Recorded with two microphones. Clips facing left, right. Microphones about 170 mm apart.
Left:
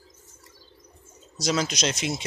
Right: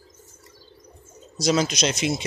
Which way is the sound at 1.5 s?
10° right (ahead or behind).